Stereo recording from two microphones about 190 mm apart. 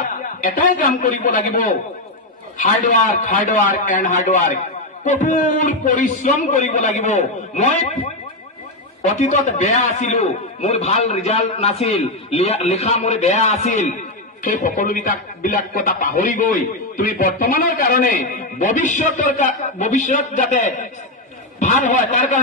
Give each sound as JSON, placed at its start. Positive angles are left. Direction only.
{"t": 0.4, "sound": "a man's voice", "side_deg": 45}